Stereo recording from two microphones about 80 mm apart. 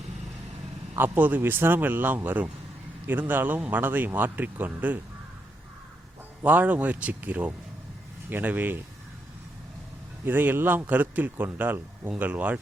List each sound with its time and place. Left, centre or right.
0.9 s speech: right
6.4 s speech: centre
10.2 s speech: right